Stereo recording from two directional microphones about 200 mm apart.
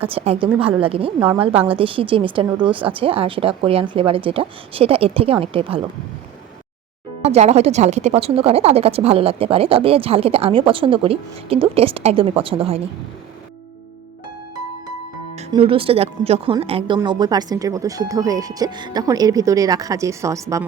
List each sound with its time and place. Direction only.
0.1 s speech: 30° right (ahead or behind)
7.2 s speech: 35° right (ahead or behind)
15.4 s speech: 25° right (ahead or behind)